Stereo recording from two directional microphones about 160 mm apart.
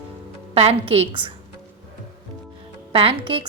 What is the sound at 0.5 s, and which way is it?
Speech, 40° right (ahead or behind).